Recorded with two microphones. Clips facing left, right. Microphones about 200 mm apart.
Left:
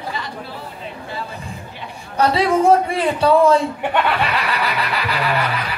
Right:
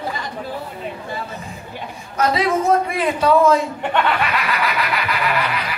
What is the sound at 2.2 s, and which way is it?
A man's voice, 30° left (ahead or behind).